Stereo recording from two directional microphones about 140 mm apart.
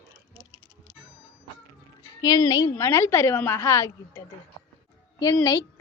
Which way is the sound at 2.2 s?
25° left (ahead or behind).